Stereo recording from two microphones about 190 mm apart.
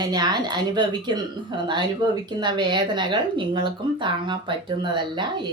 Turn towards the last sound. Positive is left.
turn(degrees=-25)  # may be behind; listen again after turning